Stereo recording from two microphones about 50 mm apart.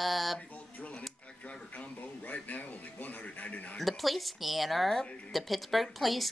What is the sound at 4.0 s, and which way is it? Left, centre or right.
Speech, centre.